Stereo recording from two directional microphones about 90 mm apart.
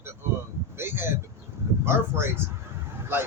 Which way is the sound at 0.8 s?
25° right (ahead or behind).